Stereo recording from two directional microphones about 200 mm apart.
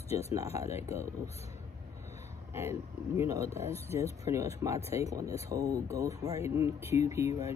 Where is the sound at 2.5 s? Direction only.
10° right (ahead or behind).